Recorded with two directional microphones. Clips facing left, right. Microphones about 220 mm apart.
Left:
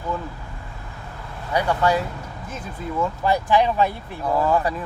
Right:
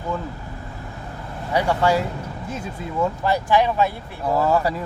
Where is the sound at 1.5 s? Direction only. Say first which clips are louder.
Right 1 dB; 25° right (ahead or behind).